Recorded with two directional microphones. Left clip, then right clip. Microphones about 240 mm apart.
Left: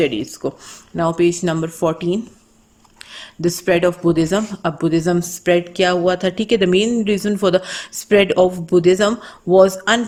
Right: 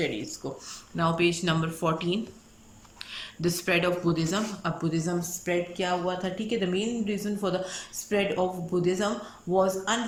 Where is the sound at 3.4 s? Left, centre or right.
Left.